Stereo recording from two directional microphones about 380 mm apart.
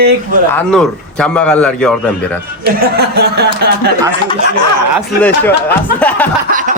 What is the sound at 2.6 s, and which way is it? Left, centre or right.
Speech, right.